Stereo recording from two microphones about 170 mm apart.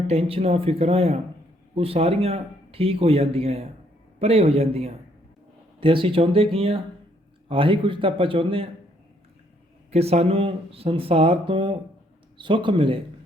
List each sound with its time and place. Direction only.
0.1 s speech: 35° right (ahead or behind)
9.9 s speech: 35° right (ahead or behind)